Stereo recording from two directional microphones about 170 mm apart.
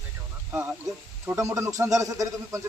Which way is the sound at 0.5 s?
10° right (ahead or behind).